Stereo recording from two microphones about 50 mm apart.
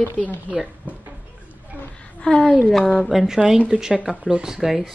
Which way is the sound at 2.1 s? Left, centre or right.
Centre.